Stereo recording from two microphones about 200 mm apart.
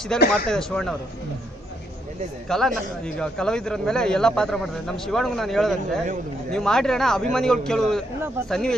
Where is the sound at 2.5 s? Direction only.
Centre (ahead or behind).